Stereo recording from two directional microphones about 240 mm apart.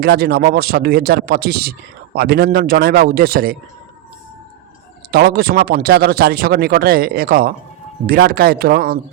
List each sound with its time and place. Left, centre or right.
0.0 s speech: right
5.1 s speech: right